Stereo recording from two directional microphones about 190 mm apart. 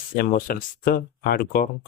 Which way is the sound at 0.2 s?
50° left (ahead or behind).